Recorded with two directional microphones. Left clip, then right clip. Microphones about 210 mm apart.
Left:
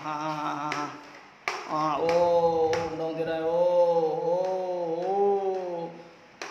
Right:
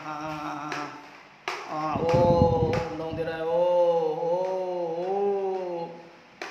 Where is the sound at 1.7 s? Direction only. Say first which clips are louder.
Left 3 dB; 20° left (ahead or behind).